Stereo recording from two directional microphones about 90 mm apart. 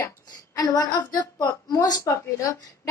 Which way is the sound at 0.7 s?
45° left (ahead or behind).